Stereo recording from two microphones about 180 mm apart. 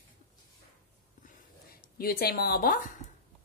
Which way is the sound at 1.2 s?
55° left (ahead or behind).